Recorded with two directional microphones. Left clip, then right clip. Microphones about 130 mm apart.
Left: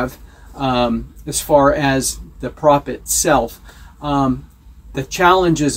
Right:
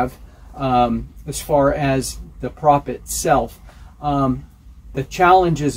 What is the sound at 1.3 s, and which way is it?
Speech, 30° right (ahead or behind).